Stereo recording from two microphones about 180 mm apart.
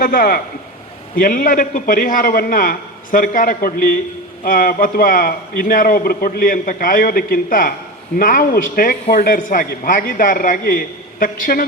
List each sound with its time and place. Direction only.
0.0 s a man's voice: 55° left (ahead or behind)